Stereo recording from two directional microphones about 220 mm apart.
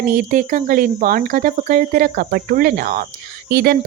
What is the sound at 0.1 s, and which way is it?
Speech, 35° right (ahead or behind).